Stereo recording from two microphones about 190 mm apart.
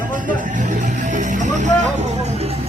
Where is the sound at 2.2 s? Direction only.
35° right (ahead or behind).